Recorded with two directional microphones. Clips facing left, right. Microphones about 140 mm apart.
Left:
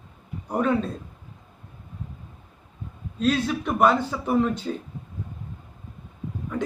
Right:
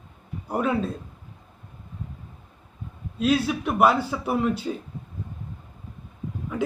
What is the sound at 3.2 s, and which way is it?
A man's voice, 10° right (ahead or behind).